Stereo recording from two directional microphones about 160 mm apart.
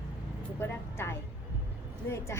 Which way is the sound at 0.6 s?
15° left (ahead or behind).